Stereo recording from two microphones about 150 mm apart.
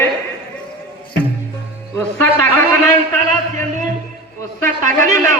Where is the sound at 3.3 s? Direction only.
55° right (ahead or behind).